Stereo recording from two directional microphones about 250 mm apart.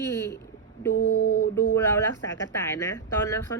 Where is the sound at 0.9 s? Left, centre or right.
Left.